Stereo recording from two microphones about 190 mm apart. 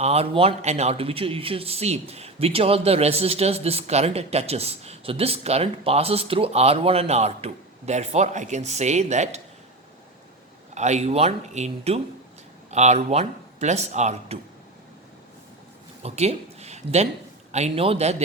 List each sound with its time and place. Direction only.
0.0 s speech: 35° right (ahead or behind)
10.8 s speech: 35° right (ahead or behind)
16.0 s speech: 35° right (ahead or behind)